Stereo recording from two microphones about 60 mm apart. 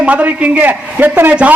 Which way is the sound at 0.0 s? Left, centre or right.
Right.